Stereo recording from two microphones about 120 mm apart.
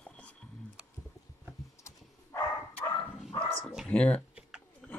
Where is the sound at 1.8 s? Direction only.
25° left (ahead or behind).